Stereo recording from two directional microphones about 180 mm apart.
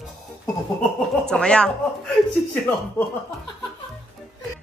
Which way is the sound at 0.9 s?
5° left (ahead or behind).